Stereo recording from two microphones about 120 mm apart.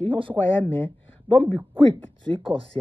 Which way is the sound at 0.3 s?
10° left (ahead or behind).